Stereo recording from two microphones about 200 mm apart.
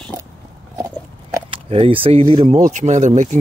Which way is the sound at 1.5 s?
30° right (ahead or behind).